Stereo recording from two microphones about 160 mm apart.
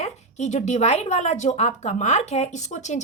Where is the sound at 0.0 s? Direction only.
45° left (ahead or behind).